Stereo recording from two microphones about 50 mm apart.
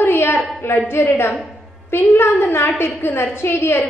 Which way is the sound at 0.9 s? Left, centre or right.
Left.